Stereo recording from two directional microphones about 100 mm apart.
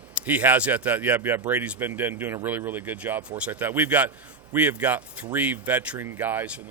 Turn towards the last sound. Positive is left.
turn(degrees=-15)  # may be behind; listen again after turning